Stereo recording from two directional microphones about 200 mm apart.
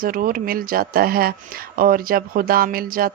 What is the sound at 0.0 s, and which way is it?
Speech, 45° right (ahead or behind).